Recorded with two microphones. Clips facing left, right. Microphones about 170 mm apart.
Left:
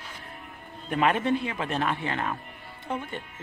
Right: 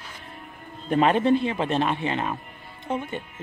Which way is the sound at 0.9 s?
30° right (ahead or behind).